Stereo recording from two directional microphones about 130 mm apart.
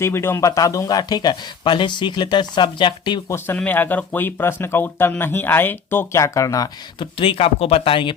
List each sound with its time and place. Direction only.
0.0 s speech: 20° left (ahead or behind); by 3.2 s 40° left (ahead or behind)
3.2 s speech: 20° left (ahead or behind)
7.0 s speech: 45° left (ahead or behind)